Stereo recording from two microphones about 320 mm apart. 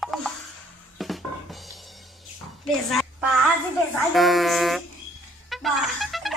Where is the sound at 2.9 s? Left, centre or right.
Centre.